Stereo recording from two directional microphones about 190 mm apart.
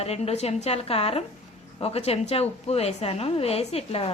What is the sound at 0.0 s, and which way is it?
A woman's voice, 35° left (ahead or behind).